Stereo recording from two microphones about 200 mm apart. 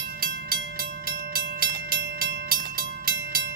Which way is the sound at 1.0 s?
50° right (ahead or behind).